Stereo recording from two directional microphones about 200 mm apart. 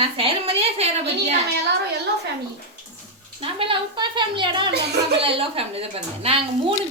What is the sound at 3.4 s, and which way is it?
A woman's voice, 25° right (ahead or behind).